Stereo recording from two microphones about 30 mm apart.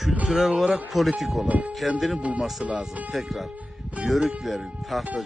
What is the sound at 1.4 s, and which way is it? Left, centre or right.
Speech, right.